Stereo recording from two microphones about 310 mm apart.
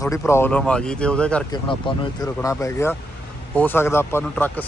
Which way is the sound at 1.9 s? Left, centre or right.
Centre.